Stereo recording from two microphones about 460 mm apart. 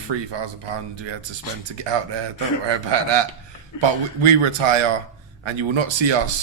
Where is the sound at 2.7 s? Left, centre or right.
Right.